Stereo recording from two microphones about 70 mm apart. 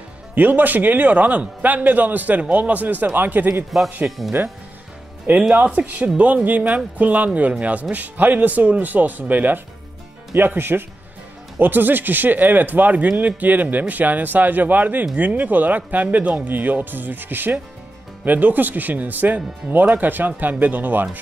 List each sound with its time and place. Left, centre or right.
0.3 s a man's voice: right
5.3 s a man's voice: right